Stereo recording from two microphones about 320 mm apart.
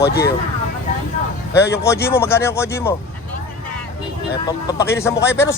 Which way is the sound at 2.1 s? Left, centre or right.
Centre.